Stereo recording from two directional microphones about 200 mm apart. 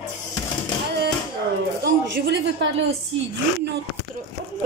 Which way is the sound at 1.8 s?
60° right (ahead or behind).